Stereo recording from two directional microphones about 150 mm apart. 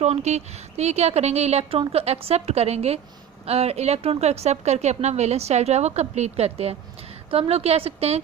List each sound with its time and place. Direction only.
0.0 s speech: 45° right (ahead or behind)